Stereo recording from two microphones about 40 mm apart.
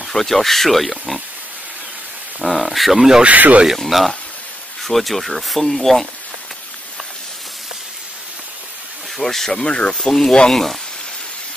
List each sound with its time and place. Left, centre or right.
0.0 s speech: centre
2.4 s speech: centre
3.3 s speech: right
3.7 s speech: centre
9.2 s speech: centre
9.6 s speech: left
9.9 s speech: centre